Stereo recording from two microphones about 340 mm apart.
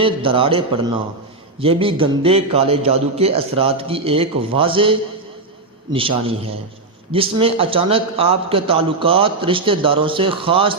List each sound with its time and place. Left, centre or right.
0.0 s a man's voice: centre